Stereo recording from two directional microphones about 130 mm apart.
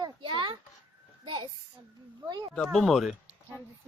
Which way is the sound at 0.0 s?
35° right (ahead or behind).